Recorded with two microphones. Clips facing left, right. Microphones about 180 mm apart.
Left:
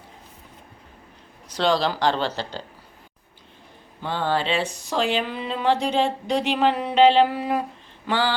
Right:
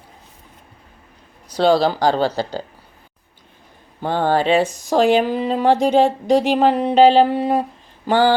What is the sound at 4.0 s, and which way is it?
Speech, 50° right (ahead or behind).